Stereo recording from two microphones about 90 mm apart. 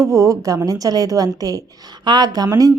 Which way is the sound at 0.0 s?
35° right (ahead or behind).